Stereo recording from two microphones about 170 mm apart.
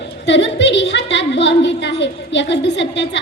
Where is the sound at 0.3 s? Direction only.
90° left.